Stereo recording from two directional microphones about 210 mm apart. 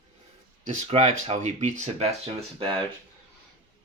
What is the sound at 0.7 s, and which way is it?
Speech, 35° right (ahead or behind).